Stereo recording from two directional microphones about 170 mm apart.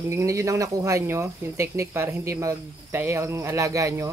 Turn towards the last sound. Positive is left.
turn(degrees=-20)  # may be behind; listen again after turning